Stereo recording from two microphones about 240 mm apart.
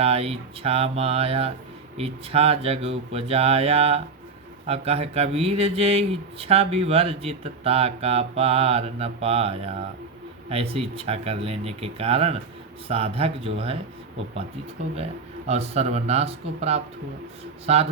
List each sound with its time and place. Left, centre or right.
0.0 s speech: right
14.9 s speech: right